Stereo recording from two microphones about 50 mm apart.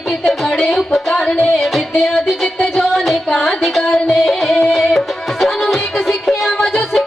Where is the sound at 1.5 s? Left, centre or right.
Centre.